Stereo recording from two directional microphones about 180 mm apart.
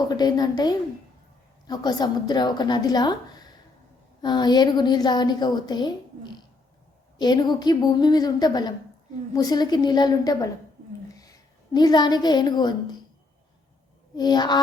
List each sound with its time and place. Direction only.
0.1 s a woman's voice: 20° left (ahead or behind)
14.2 s a woman's voice: 25° left (ahead or behind)